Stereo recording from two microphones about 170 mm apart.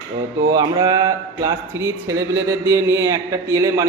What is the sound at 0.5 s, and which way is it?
Speech, 20° right (ahead or behind).